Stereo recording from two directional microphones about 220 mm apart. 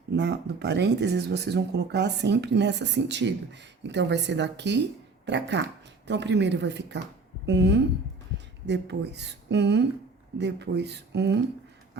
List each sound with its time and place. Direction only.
0.1 s speech: 50° right (ahead or behind)